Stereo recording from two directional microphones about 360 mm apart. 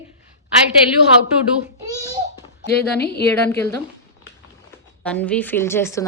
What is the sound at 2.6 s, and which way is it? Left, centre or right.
Speech, left.